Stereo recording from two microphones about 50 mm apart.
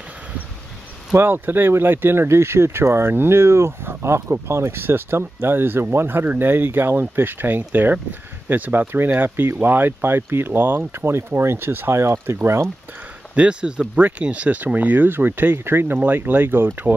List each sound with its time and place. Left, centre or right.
1.1 s speech: right
2.2 s speech: right
13.3 s speech: right
13.9 s speech: right
15.6 s speech: right